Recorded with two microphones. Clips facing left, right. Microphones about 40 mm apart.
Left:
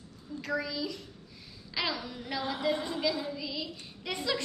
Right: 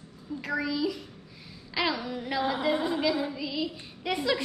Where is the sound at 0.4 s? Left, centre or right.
Centre.